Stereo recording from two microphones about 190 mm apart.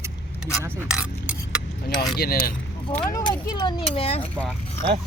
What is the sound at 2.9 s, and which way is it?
Speech, 15° left (ahead or behind).